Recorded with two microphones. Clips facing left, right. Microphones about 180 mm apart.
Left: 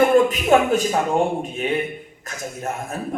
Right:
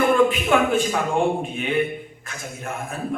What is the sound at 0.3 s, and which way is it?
A man's voice, 40° left (ahead or behind).